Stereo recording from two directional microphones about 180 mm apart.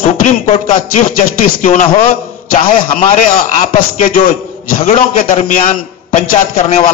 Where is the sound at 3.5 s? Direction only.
50° left (ahead or behind).